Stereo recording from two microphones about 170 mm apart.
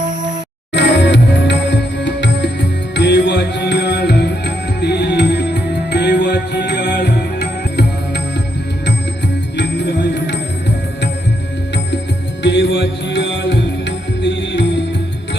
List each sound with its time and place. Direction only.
0.7 s music: 90° left
12.4 s music: 90° left